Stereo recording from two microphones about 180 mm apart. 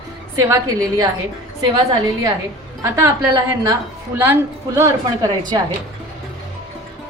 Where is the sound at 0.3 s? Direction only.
20° right (ahead or behind).